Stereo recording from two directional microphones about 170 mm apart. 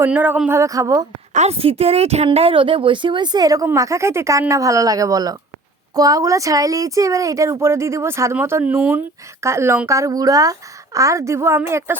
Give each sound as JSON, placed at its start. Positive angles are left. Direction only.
{"t": 0.0, "sound": "a woman's voice", "side_deg": -10}
{"t": 1.3, "sound": "a woman's voice", "side_deg": -40}